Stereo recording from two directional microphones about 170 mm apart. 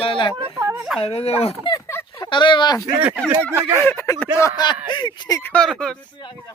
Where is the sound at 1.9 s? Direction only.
15° left (ahead or behind).